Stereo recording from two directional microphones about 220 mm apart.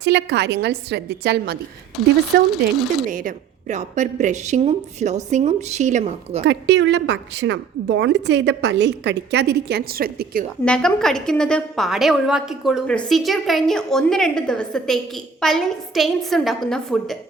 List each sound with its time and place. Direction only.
0.0 s a woman's voice: 50° right (ahead or behind)
2.0 s a woman's voice: centre (ahead or behind)
2.3 s a woman's voice: 45° right (ahead or behind)
6.4 s a woman's voice: 55° right (ahead or behind)
10.7 s a woman's voice: 5° left (ahead or behind)